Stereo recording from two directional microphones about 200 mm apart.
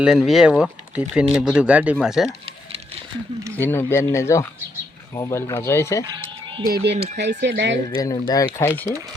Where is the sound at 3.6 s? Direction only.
10° left (ahead or behind).